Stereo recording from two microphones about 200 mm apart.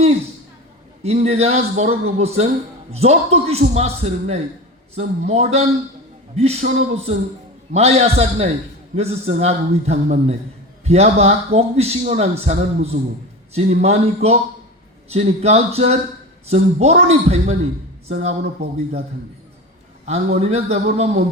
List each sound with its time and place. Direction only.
1.0 s a man's voice: 30° right (ahead or behind)
20.1 s a man's voice: 30° right (ahead or behind)